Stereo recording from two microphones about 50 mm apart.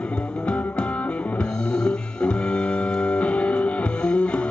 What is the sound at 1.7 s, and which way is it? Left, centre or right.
Music, centre.